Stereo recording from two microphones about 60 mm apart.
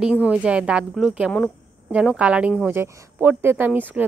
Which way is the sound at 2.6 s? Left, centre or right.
Right.